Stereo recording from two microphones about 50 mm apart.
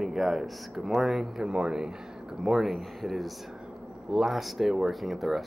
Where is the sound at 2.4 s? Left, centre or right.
Centre.